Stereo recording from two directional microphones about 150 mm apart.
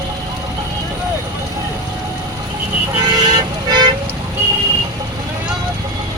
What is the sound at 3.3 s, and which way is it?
Vehicle, 25° right (ahead or behind).